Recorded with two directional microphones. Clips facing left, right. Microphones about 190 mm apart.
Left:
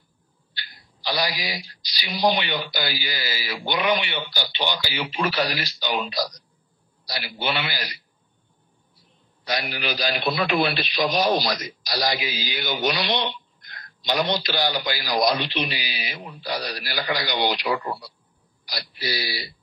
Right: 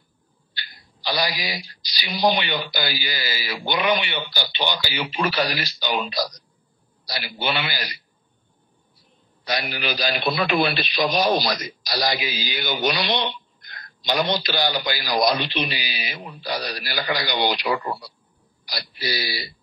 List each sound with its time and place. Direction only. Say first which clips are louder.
0.6 s speech: right 1 dB; 65° right (ahead or behind)
9.5 s speech: right 1 dB; 65° right (ahead or behind)